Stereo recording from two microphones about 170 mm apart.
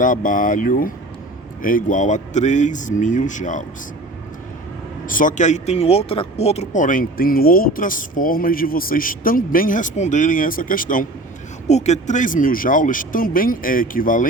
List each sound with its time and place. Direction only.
0.0 s speech: 50° left (ahead or behind)
5.0 s speech: 50° left (ahead or behind)
11.7 s speech: 40° left (ahead or behind)